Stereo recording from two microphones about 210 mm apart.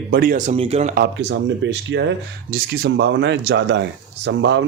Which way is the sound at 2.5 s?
50° right (ahead or behind).